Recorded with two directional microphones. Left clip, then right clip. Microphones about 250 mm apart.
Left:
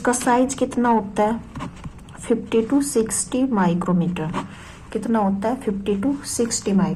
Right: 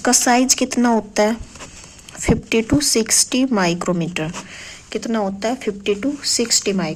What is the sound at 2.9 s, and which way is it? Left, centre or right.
Speech, right.